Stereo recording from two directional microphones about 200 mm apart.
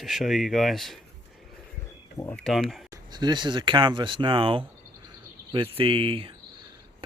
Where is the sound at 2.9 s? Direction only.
20° right (ahead or behind).